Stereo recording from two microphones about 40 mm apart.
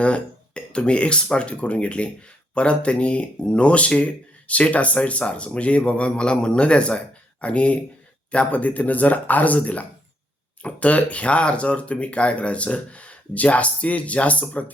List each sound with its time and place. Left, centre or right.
0.0 s speech: left